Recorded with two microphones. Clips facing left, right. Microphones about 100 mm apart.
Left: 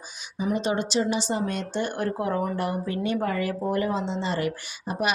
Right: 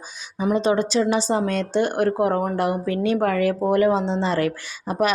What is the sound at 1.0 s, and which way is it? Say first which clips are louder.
Speech: right 5 dB; 90° right.